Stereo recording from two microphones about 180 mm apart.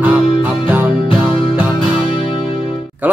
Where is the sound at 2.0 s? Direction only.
30° left (ahead or behind).